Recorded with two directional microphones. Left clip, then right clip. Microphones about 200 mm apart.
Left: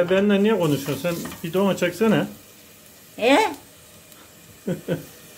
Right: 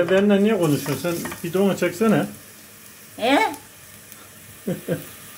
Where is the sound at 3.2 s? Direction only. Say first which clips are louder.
Left 1 dB; 35° left (ahead or behind).